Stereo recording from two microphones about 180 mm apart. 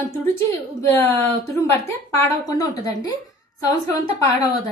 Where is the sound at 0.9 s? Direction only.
10° left (ahead or behind).